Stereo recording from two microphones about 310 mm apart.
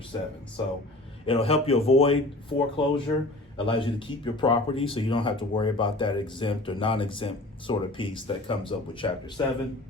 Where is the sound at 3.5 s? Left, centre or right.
Centre.